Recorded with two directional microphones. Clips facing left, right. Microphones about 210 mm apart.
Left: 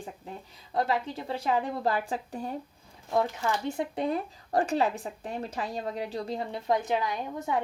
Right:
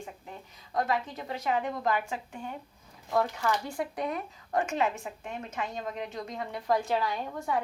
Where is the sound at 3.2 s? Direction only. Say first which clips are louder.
Left 1 dB; 20° left (ahead or behind).